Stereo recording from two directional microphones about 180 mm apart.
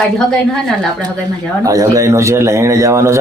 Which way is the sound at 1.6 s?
20° right (ahead or behind).